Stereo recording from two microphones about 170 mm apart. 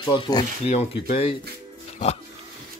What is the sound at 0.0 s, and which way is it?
Speech, 25° left (ahead or behind).